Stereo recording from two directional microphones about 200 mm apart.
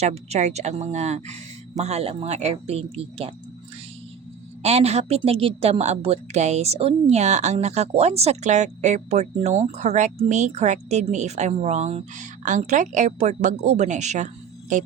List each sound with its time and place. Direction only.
0.0 s a woman's voice: 35° right (ahead or behind)
4.6 s a woman's voice: 30° right (ahead or behind)